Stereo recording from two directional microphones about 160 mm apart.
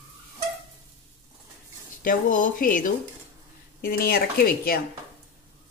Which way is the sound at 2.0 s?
55° left (ahead or behind).